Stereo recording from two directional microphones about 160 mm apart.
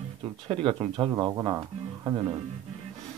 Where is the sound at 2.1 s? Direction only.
30° right (ahead or behind).